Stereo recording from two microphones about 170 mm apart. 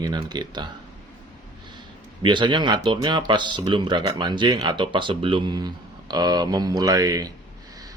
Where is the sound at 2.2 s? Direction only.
30° right (ahead or behind).